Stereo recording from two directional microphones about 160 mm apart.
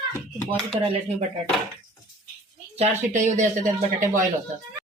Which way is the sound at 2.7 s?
50° right (ahead or behind).